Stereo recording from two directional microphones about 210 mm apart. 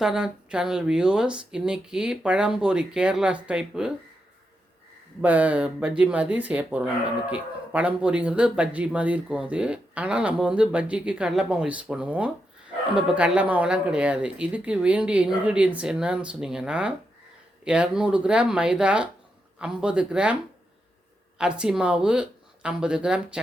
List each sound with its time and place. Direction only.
0.0 s speech: 5° right (ahead or behind)
5.2 s speech: 5° right (ahead or behind)
21.3 s speech: 5° right (ahead or behind)